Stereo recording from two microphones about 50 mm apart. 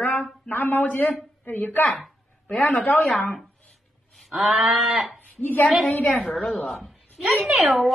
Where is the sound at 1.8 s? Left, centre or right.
Centre.